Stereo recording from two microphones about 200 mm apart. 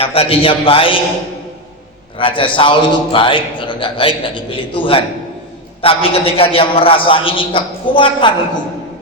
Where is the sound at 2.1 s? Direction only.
25° left (ahead or behind).